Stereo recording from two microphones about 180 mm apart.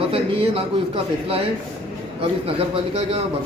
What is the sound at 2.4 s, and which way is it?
Speech, 30° right (ahead or behind).